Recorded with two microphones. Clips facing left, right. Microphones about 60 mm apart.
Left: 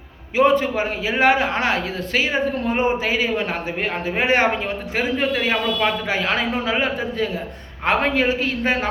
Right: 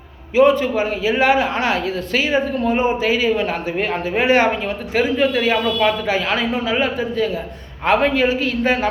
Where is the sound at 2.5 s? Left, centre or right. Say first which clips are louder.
Right 2 dB; left.